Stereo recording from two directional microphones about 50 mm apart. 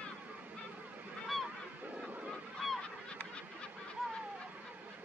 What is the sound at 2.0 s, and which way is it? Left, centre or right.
Goose, right.